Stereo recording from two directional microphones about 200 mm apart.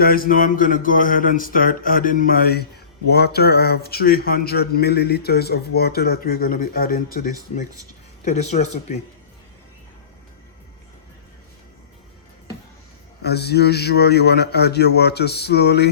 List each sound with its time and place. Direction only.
0.0 s speech: 45° left (ahead or behind)
8.2 s speech: 35° left (ahead or behind)
13.2 s a man's voice: 55° left (ahead or behind)